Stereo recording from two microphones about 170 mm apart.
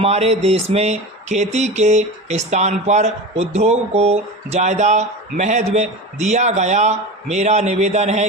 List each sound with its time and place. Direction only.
0.0 s speech: 35° right (ahead or behind)